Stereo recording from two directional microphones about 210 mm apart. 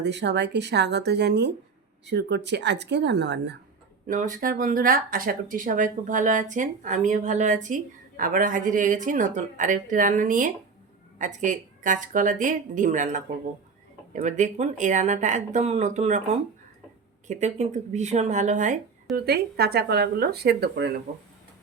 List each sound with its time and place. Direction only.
0.0 s a woman's voice: 55° right (ahead or behind)
4.0 s speech: 40° right (ahead or behind)
19.1 s speech: 50° right (ahead or behind)